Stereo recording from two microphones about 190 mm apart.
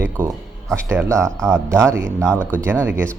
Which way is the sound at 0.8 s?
15° right (ahead or behind).